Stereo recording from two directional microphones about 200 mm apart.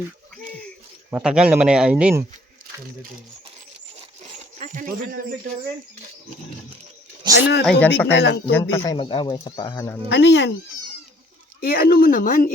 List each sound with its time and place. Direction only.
1.1 s speech: 5° right (ahead or behind)
4.5 s speech: 40° right (ahead or behind)
7.3 s speech: 20° right (ahead or behind)
7.6 s speech: 5° left (ahead or behind)
8.1 s speech: 55° left (ahead or behind)
8.5 s speech: 15° left (ahead or behind)
10.1 s speech: 60° left (ahead or behind)
11.6 s speech: 50° left (ahead or behind)